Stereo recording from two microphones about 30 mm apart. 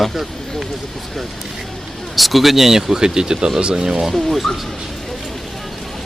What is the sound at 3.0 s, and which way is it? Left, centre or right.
Speech, right.